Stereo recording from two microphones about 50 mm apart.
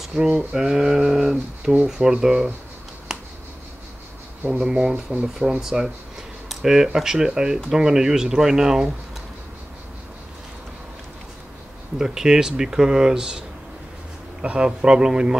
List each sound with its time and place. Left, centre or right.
0.0 s a sound: centre
0.5 s speech: centre
4.5 s speech: centre
12.0 s speech: centre
14.4 s speech: right